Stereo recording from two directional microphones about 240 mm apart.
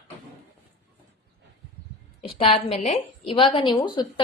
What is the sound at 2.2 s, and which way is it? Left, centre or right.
A woman's voice, left.